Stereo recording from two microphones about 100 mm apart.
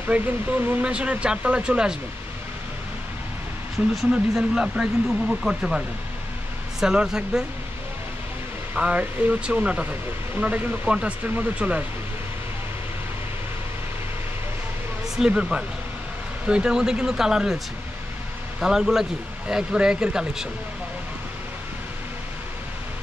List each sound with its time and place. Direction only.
0.0 s speech: 20° right (ahead or behind)
3.9 s speech: 5° right (ahead or behind)
8.7 s speech: 15° right (ahead or behind)
15.1 s speech: 10° right (ahead or behind)
18.6 s speech: 5° right (ahead or behind)